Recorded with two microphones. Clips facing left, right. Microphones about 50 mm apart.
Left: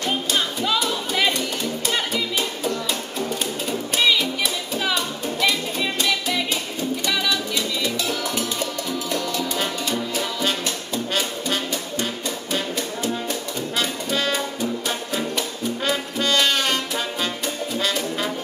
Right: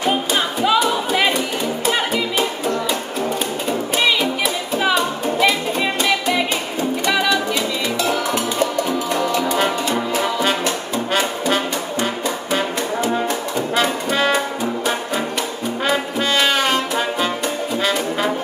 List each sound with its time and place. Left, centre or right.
0.0 s music: centre
11.1 s brass instrument: centre
13.7 s music: centre
15.8 s brass instrument: centre